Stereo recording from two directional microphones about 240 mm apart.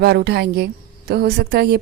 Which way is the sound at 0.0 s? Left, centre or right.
Right.